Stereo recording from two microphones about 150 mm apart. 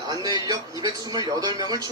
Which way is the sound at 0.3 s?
25° right (ahead or behind).